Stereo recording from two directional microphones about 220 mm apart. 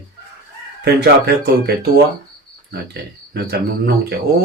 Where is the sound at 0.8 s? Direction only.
45° right (ahead or behind).